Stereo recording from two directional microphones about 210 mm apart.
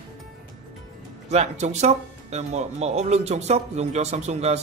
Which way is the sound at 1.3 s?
30° right (ahead or behind).